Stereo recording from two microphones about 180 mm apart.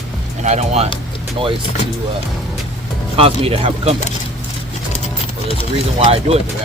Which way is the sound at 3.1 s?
30° right (ahead or behind).